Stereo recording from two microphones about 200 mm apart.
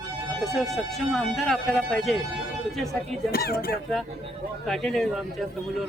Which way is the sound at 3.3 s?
50° left (ahead or behind).